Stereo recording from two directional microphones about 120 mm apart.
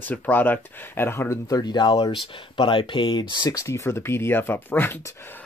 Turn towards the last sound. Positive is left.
turn(degrees=15)  # may be behind; listen again after turning